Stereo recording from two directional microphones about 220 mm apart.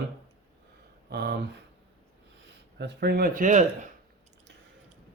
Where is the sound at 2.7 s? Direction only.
50° right (ahead or behind); by 3.8 s 35° right (ahead or behind).